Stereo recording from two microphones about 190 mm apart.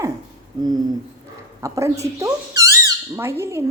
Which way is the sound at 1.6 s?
15° right (ahead or behind).